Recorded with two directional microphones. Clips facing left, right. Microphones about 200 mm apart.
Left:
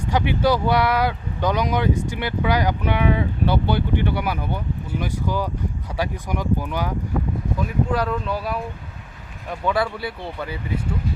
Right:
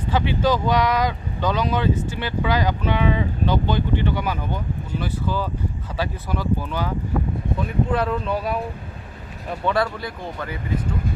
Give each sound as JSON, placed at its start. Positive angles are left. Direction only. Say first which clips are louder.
{"t": 0.1, "sound": "speech", "louder": "left 1 dB", "side_deg": 15}
{"t": 7.9, "sound": "speech", "louder": "right 1 dB", "side_deg": -5}
{"t": 9.6, "sound": "speech", "louder": "even", "side_deg": 5}